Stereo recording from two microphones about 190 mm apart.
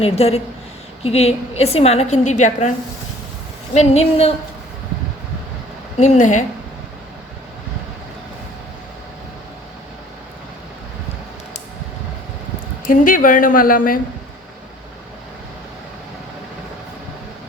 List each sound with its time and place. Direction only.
0.0 s a woman's voice: 30° left (ahead or behind)
3.8 s a woman's voice: 35° left (ahead or behind)
6.0 s a woman's voice: 40° left (ahead or behind)
12.8 s a woman's voice: 45° left (ahead or behind)